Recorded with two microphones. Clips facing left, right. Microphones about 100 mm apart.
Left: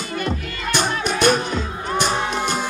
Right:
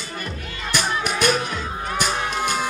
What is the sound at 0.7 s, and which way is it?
Music, 30° left (ahead or behind).